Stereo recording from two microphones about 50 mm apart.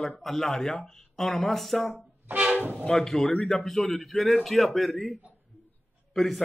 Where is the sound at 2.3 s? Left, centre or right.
Right.